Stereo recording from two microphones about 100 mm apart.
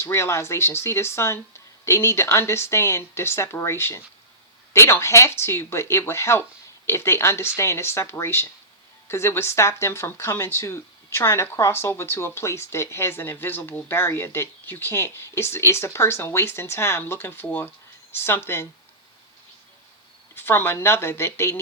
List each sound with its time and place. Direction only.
0.0 s speech: 25° left (ahead or behind)
20.3 s speech: 20° left (ahead or behind)